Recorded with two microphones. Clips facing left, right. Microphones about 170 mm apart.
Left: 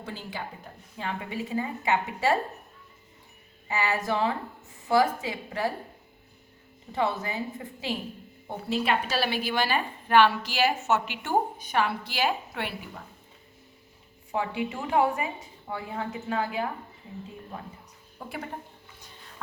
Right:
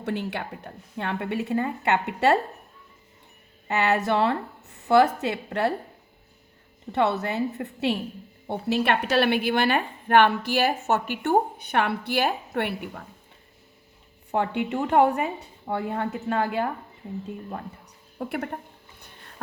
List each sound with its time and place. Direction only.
0.0 s a woman's voice: 70° right (ahead or behind)
3.7 s a woman's voice: 70° right (ahead or behind)
6.9 s a woman's voice: 70° right (ahead or behind)
14.3 s a woman's voice: 60° right (ahead or behind)
18.2 s a sound: 60° right (ahead or behind)